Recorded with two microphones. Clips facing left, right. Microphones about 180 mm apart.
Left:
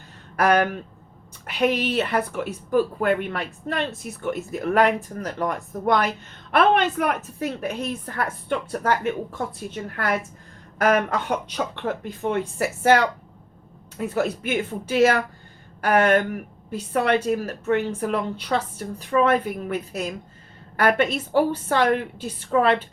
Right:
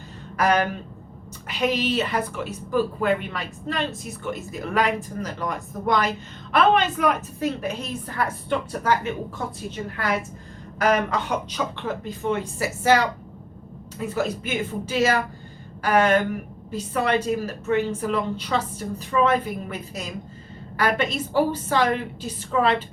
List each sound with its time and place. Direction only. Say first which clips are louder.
0.3 s a woman's voice: left 2 dB; 55° left (ahead or behind)
14.1 s speech: left 2 dB; 60° left (ahead or behind)